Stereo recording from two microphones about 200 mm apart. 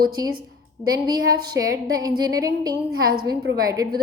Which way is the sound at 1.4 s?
20° right (ahead or behind).